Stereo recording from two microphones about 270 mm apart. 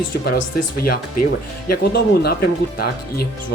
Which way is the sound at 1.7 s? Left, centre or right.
Left.